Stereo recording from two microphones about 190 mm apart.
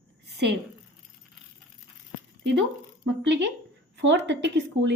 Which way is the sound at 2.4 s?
70° right (ahead or behind).